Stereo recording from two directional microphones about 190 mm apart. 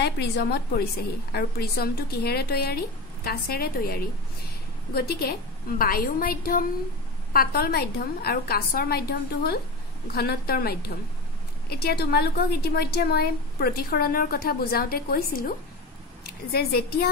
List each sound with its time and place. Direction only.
0.0 s a woman's voice: 60° left (ahead or behind)